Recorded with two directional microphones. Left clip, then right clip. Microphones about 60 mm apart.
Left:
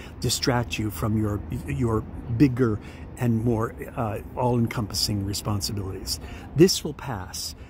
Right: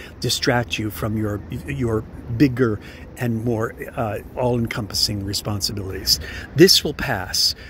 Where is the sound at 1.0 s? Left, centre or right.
Centre.